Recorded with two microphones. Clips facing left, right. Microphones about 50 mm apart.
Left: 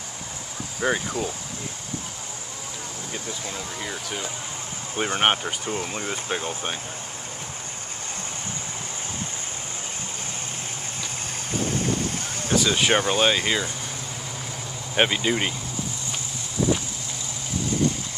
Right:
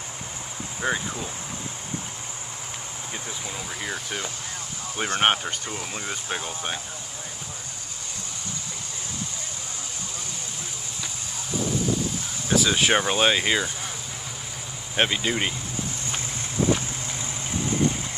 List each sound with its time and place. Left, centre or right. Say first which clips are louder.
0.7 s speech: left 2 dB; centre
3.1 s speech: left 1 dB; centre
4.9 s speech: even; centre
11.5 s boat: even; left
12.5 s speech: even; centre
15.0 s speech: left 2 dB; centre